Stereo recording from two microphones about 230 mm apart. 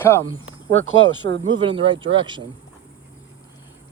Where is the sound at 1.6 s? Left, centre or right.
Right.